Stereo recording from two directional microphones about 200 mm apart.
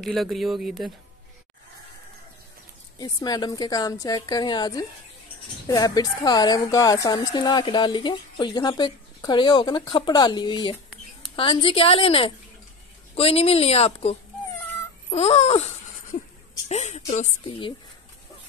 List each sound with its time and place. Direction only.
0.0 s speech: centre (ahead or behind)
3.0 s a woman's voice: 20° left (ahead or behind)
15.0 s a sound: 30° left (ahead or behind)
16.6 s a woman's voice: 35° left (ahead or behind)